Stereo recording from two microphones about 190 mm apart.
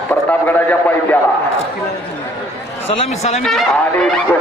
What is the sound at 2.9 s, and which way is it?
Speech, 35° left (ahead or behind).